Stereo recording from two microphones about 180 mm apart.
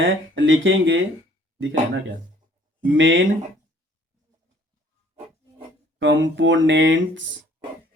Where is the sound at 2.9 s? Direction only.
90° right.